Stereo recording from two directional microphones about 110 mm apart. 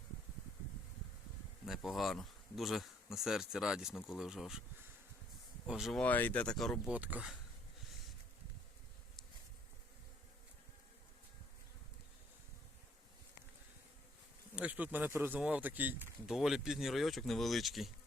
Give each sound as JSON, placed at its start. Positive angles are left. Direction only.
{"t": 1.6, "sound": "speech", "side_deg": 0}
{"t": 5.6, "sound": "speech", "side_deg": -5}
{"t": 6.0, "sound": "speech", "side_deg": 15}
{"t": 6.8, "sound": "speech", "side_deg": -15}
{"t": 14.5, "sound": "speech", "side_deg": -10}
{"t": 16.2, "sound": "speech", "side_deg": -5}